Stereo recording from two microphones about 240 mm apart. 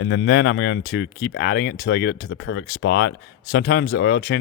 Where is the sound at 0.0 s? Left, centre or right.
Left.